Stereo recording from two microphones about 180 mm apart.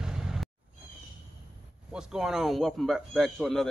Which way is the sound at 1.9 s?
5° right (ahead or behind).